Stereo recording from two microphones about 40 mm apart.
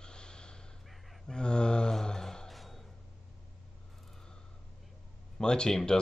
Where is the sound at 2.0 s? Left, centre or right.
Centre.